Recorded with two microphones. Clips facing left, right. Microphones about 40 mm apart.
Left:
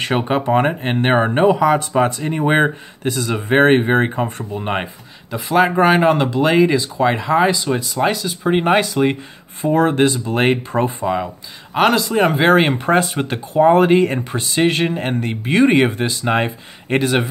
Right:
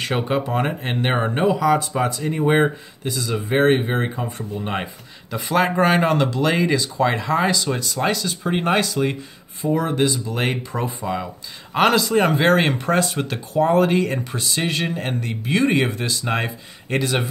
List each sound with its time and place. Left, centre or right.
0.0 s speech: left
1.4 s speech: left
3.2 s speech: left
5.3 s speech: centre
9.6 s speech: left
11.7 s speech: centre; by 17.3 s left